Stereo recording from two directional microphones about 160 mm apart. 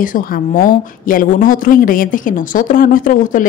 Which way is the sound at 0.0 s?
60° left (ahead or behind).